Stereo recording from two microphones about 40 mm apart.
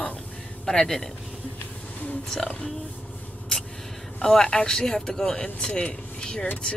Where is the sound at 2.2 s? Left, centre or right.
Centre.